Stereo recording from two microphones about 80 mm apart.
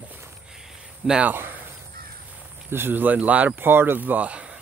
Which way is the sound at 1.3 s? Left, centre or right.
Right.